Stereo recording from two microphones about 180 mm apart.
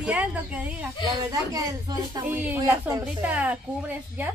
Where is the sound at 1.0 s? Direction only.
20° right (ahead or behind).